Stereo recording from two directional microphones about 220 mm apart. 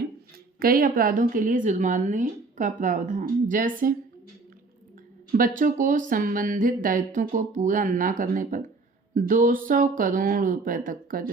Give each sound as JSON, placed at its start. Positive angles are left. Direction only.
{"t": 0.6, "sound": "a woman's voice", "side_deg": -40}
{"t": 5.4, "sound": "a woman's voice", "side_deg": -35}